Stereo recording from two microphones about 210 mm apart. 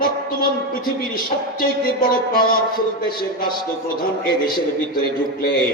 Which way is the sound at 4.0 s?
45° left (ahead or behind).